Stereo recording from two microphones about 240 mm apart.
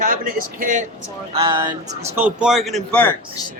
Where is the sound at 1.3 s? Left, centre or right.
Right; by 3.1 s centre.